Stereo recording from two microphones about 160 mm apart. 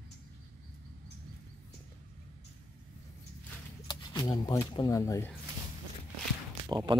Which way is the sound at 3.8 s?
25° left (ahead or behind).